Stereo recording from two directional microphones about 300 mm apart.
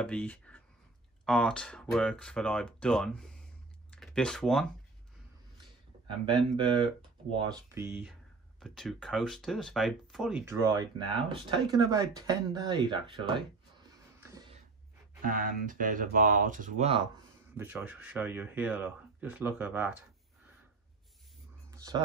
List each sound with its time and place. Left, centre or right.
0.0 s speech: centre
6.0 s speech: centre
14.2 s a sound: centre
15.2 s speech: right
17.6 s speech: centre
21.6 s a sound: centre